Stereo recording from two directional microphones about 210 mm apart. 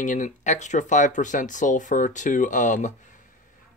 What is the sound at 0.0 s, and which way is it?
Speech, 35° left (ahead or behind).